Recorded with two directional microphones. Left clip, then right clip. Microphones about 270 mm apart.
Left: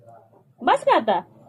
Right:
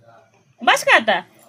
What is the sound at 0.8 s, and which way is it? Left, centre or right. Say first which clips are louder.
Speech: right 5 dB; centre.